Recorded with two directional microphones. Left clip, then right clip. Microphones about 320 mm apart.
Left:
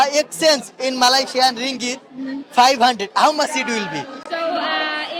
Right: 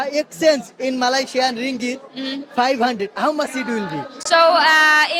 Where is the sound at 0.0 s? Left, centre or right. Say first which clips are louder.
Left 2 dB; left.